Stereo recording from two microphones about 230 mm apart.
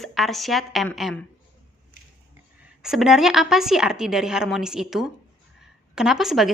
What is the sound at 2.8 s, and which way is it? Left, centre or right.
A woman's voice, centre.